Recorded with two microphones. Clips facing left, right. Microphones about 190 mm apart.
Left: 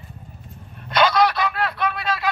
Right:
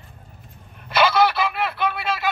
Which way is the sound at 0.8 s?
5° right (ahead or behind).